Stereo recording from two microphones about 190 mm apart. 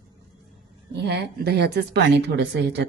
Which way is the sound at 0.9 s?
60° right (ahead or behind).